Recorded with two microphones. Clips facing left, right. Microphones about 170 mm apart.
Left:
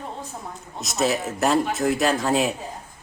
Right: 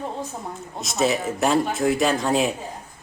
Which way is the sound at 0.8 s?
Centre (ahead or behind).